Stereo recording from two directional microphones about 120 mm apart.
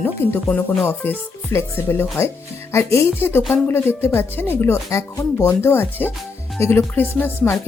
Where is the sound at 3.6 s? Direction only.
20° left (ahead or behind).